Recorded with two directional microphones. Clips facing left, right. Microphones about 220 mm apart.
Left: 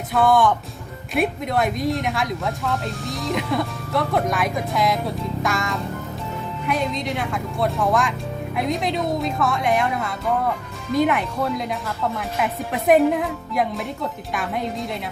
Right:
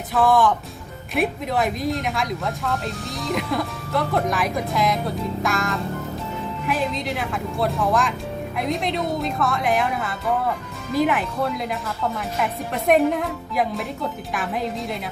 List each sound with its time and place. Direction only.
0.1 s speech: centre (ahead or behind)